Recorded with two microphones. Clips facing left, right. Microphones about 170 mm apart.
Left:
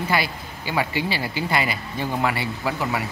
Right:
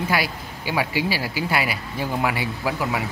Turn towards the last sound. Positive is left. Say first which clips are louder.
# right 1 dB
turn(degrees=-10)  # may be behind; listen again after turning